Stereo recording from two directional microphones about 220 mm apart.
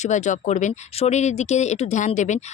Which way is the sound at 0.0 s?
35° left (ahead or behind).